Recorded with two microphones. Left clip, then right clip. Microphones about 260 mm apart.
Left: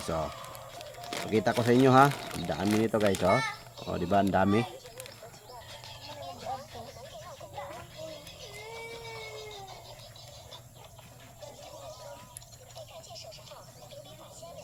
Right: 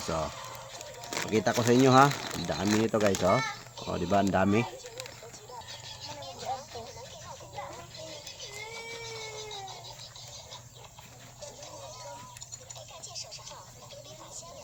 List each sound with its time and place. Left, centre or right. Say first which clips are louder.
0.8 s speech: right 1 dB; centre
6.0 s a sound: left 1 dB; right
8.4 s cat: right 3 dB; right